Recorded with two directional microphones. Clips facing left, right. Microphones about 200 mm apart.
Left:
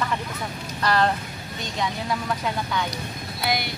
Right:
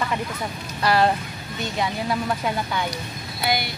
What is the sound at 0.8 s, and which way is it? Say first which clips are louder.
Speech: right 2 dB; 10° right (ahead or behind).